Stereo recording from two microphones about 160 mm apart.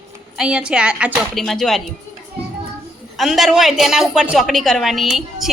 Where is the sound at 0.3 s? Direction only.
5° right (ahead or behind).